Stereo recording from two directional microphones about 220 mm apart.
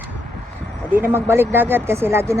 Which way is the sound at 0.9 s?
10° right (ahead or behind).